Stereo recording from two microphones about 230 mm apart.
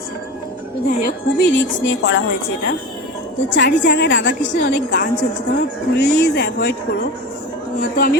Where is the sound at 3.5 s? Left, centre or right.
Left.